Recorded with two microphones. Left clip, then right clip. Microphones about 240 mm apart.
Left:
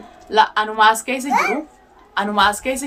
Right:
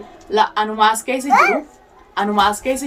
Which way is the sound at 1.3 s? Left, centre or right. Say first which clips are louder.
Right 5 dB; centre.